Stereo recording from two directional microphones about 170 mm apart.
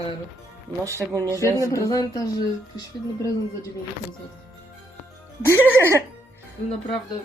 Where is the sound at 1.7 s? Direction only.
20° left (ahead or behind).